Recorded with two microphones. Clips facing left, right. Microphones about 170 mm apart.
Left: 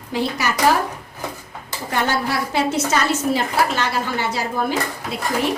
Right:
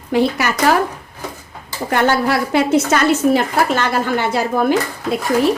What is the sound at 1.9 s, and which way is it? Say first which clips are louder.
A woman's voice: right 6 dB; 60° right (ahead or behind).